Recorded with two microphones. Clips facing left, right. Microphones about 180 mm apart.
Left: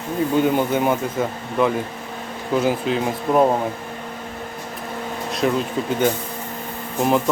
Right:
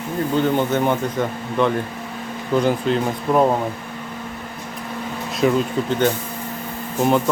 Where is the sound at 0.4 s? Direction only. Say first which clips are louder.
Even; 10° left (ahead or behind).